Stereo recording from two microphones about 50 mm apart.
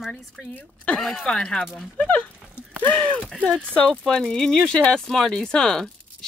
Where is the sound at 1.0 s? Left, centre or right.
Centre.